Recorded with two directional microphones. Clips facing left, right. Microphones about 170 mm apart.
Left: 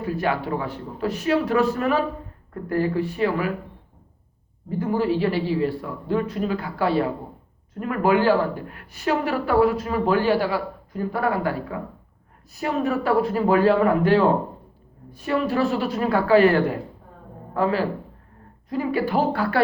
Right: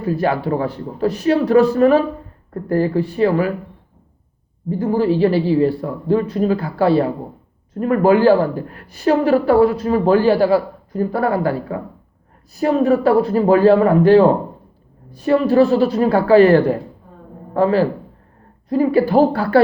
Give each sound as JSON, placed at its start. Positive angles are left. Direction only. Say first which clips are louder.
{"t": 0.0, "sound": "speech", "louder": "right 6 dB", "side_deg": -35}
{"t": 4.8, "sound": "a man's voice", "louder": "right 6 dB", "side_deg": -35}